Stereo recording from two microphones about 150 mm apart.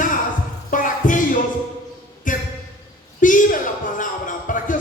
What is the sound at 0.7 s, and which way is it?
Music, 60° left (ahead or behind).